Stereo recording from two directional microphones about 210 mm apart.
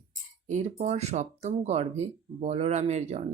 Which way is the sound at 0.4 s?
35° right (ahead or behind).